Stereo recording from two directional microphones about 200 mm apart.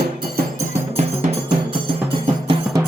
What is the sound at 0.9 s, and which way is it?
Music, 35° right (ahead or behind).